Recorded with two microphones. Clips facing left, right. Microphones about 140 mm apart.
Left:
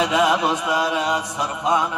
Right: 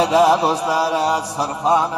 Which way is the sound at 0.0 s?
35° right (ahead or behind).